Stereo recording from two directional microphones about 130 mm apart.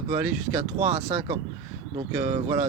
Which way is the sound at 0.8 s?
60° right (ahead or behind).